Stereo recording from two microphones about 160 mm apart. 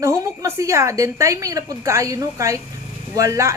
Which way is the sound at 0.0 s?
20° right (ahead or behind).